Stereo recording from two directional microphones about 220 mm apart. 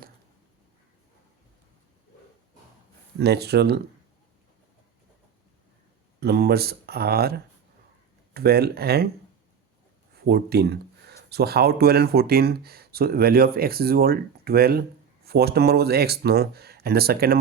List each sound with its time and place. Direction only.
3.2 s speech: 50° right (ahead or behind)
6.1 s speech: 45° right (ahead or behind)
10.2 s speech: 45° right (ahead or behind)